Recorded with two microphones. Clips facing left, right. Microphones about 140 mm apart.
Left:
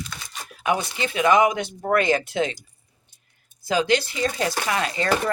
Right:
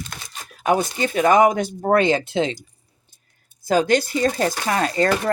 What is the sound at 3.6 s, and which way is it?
Speech, 45° right (ahead or behind).